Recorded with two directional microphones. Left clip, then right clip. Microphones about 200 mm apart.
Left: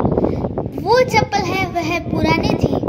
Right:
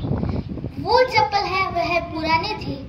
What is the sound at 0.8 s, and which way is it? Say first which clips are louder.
A child's voice: left 2 dB; 55° left (ahead or behind).